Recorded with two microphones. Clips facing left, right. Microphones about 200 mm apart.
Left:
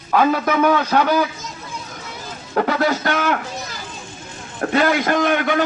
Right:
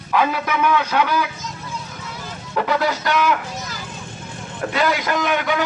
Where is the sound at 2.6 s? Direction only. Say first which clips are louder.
Left 2 dB; 50° left (ahead or behind).